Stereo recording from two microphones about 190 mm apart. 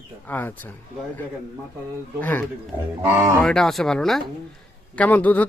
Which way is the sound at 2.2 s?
10° left (ahead or behind).